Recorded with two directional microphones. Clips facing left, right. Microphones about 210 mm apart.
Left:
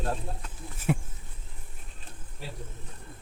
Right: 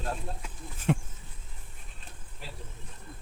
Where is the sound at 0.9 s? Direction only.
5° left (ahead or behind).